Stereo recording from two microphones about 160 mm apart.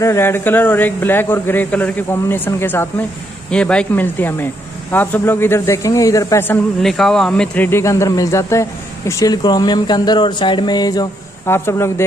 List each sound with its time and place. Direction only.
0.0 s speech: 15° left (ahead or behind)
6.8 s speech: 5° left (ahead or behind)